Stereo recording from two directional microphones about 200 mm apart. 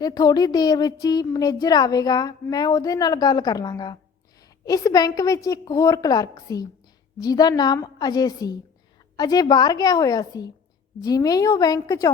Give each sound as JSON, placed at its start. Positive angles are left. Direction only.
{"t": 0.0, "sound": "a woman's voice", "side_deg": 20}